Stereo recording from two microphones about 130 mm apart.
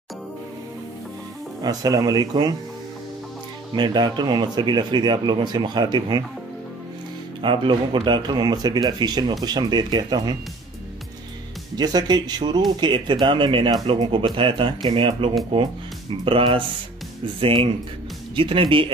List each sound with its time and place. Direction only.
1.6 s speech: 30° right (ahead or behind)
3.7 s speech: 35° right (ahead or behind)
7.4 s speech: 40° right (ahead or behind)
11.7 s speech: 30° right (ahead or behind)